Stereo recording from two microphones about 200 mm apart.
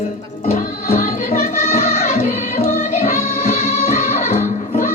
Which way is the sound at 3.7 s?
35° left (ahead or behind).